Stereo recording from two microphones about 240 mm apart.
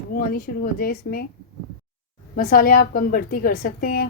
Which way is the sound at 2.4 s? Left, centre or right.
Left.